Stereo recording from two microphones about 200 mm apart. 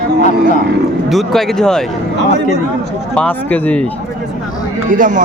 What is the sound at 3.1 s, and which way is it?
Speech, 5° left (ahead or behind).